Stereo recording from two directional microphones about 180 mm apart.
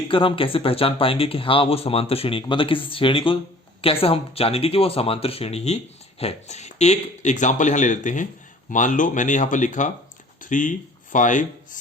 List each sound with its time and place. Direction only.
0.1 s speech: 30° left (ahead or behind); by 11.8 s 45° left (ahead or behind)